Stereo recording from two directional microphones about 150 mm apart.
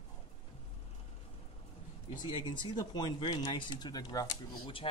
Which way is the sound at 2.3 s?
30° left (ahead or behind).